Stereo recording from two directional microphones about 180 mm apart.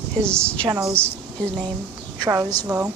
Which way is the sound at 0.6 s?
20° right (ahead or behind).